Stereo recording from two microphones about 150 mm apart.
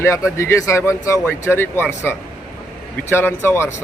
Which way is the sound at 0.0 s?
20° left (ahead or behind).